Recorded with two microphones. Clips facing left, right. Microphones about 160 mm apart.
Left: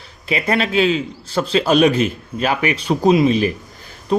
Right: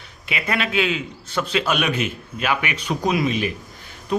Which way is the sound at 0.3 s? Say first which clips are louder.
Left 6 dB; 35° left (ahead or behind).